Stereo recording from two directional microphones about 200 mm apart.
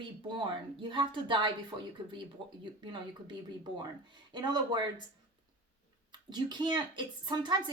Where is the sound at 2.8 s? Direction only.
25° right (ahead or behind).